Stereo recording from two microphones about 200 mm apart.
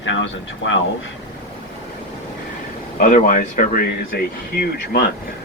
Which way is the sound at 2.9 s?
40° left (ahead or behind).